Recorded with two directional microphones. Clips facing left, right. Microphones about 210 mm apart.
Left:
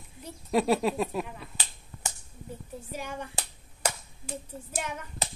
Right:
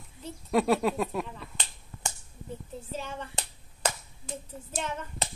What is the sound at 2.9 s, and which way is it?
A child's voice, 15° left (ahead or behind).